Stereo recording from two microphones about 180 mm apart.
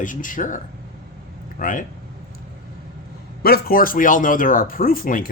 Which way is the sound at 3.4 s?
55° left (ahead or behind).